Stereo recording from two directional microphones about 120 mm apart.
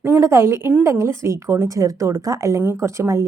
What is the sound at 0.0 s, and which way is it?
A woman's voice, 25° right (ahead or behind).